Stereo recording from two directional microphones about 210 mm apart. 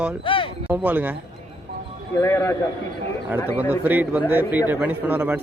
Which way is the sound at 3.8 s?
10° right (ahead or behind).